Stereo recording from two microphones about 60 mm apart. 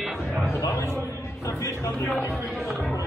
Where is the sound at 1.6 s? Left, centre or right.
Left.